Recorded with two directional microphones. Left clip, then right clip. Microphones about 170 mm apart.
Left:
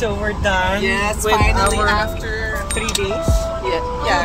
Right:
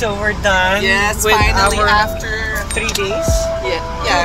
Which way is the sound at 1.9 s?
25° left (ahead or behind).